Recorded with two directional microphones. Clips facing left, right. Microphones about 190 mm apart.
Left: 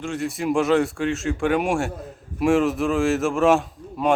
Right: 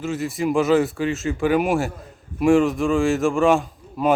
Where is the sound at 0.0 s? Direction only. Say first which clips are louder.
Right 2 dB; centre (ahead or behind).